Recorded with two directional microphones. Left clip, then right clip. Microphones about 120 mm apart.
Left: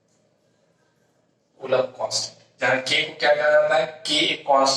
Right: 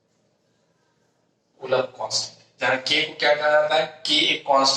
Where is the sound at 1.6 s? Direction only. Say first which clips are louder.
Left 1 dB; 35° right (ahead or behind).